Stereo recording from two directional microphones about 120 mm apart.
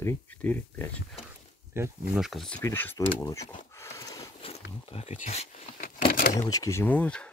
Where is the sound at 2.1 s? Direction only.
Centre (ahead or behind).